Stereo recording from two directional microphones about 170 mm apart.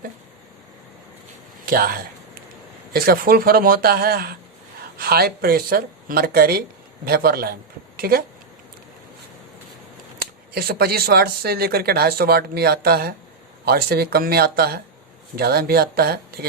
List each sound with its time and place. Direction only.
1.6 s speech: 60° right (ahead or behind)
10.2 s speech: 65° right (ahead or behind)